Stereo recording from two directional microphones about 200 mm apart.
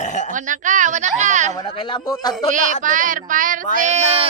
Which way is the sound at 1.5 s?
25° left (ahead or behind).